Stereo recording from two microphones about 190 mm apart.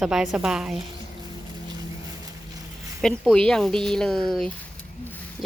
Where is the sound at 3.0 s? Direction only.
5° left (ahead or behind).